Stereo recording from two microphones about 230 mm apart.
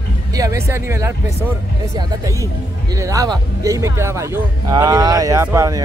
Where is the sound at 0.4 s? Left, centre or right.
Centre.